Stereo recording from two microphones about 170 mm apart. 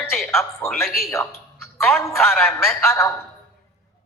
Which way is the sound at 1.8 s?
15° left (ahead or behind).